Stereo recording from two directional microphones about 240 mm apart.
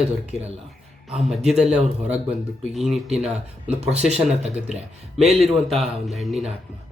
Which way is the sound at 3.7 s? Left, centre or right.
Right.